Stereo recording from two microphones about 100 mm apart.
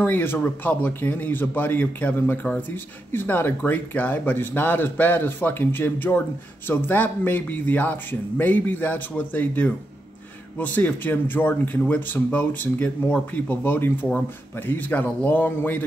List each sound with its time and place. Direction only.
0.0 s speech: 20° left (ahead or behind)